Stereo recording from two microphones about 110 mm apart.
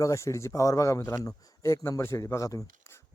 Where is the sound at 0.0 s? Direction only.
25° left (ahead or behind).